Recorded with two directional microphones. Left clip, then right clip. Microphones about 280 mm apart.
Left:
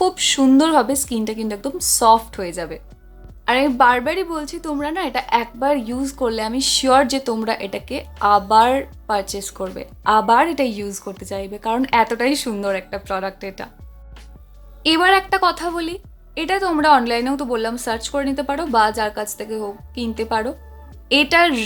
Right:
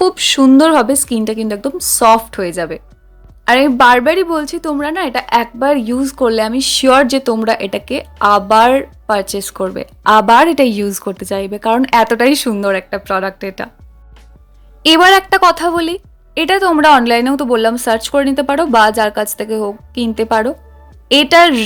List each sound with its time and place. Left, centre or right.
0.0 s a woman's voice: centre
14.8 s a woman's voice: right